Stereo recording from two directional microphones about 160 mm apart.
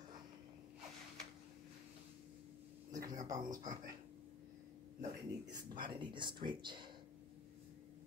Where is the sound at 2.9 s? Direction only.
20° right (ahead or behind).